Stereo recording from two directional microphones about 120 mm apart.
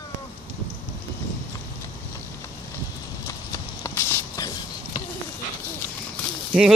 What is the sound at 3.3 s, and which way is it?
Clip-clop, 25° left (ahead or behind).